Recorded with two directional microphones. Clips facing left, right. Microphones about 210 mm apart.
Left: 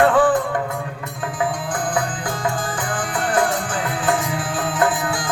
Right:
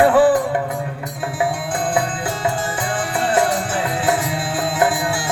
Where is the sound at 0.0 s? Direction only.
10° right (ahead or behind).